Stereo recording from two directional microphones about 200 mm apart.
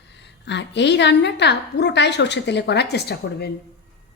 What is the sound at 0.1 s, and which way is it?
A woman's voice, 60° left (ahead or behind).